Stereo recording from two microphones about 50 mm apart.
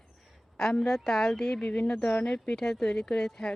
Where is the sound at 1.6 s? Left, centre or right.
Left.